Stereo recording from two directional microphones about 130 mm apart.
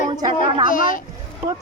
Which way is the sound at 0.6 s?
90° left.